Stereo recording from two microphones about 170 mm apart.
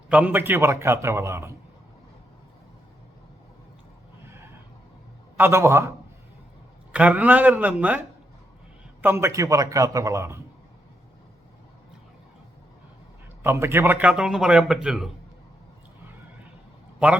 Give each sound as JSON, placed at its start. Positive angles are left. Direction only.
{"t": 0.1, "sound": "a man's voice", "side_deg": -10}
{"t": 5.4, "sound": "a man's voice", "side_deg": -15}
{"t": 6.9, "sound": "a man's voice", "side_deg": -10}
{"t": 13.4, "sound": "speech", "side_deg": -15}